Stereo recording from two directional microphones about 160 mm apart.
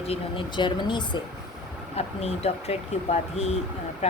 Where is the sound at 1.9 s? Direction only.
40° left (ahead or behind).